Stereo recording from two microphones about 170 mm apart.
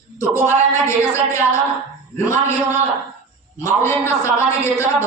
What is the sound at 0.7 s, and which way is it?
A man's voice, 15° left (ahead or behind).